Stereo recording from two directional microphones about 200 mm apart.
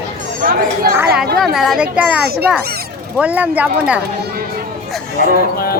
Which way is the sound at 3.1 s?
5° right (ahead or behind).